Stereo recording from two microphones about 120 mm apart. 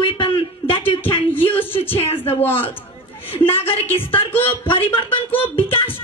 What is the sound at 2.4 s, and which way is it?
A woman's voice, 15° left (ahead or behind).